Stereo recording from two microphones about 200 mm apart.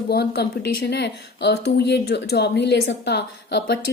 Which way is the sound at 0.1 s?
50° left (ahead or behind).